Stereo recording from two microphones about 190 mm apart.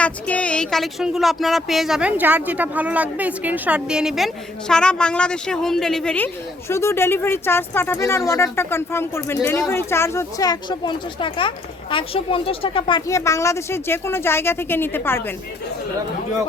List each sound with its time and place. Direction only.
0.0 s speech: 5° left (ahead or behind); by 13.0 s 25° left (ahead or behind)
13.1 s speech: 15° left (ahead or behind)